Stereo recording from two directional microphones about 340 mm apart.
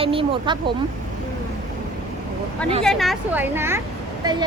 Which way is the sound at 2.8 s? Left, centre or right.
Centre.